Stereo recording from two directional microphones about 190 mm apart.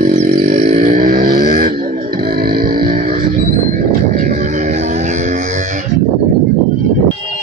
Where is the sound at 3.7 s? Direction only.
45° right (ahead or behind).